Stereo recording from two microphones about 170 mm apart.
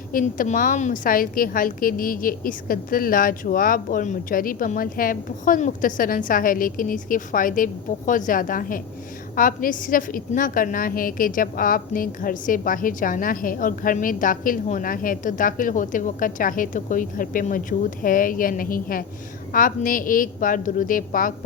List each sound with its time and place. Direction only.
0.1 s a woman's voice: 55° left (ahead or behind)